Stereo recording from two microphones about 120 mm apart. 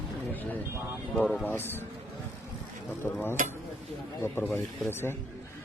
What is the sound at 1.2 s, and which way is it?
Speech, 10° left (ahead or behind).